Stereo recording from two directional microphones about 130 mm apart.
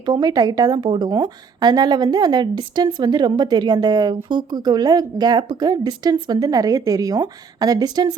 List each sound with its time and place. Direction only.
0.0 s a woman's voice: 30° right (ahead or behind)